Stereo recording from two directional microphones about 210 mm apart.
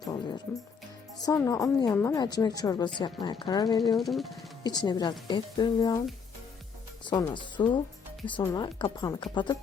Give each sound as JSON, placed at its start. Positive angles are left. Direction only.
{"t": 1.2, "sound": "a woman's voice", "side_deg": 15}
{"t": 3.9, "sound": "speech", "side_deg": 0}
{"t": 4.6, "sound": "speech", "side_deg": 20}
{"t": 7.0, "sound": "speech", "side_deg": 20}